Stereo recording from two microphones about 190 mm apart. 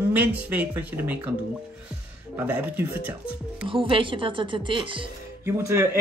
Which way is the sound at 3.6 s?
25° right (ahead or behind).